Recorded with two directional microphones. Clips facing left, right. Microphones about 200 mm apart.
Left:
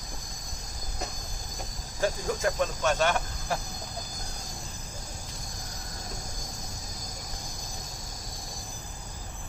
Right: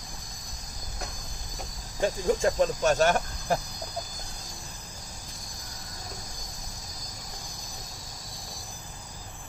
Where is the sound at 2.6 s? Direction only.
40° right (ahead or behind).